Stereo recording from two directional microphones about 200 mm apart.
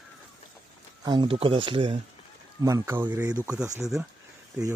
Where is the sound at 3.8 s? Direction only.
Centre (ahead or behind).